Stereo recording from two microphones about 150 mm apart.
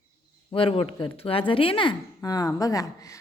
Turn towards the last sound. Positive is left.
turn(degrees=20)  # may be behind; listen again after turning